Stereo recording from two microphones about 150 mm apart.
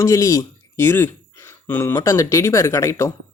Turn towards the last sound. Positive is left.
turn(degrees=20)  # may be behind; listen again after turning